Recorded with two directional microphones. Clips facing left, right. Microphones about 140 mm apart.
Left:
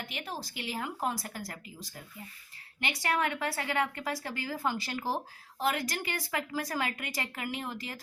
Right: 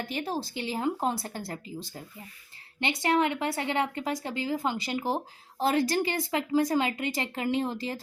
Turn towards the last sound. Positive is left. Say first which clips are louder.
# right 9 dB
turn(degrees=-30)  # may be behind; listen again after turning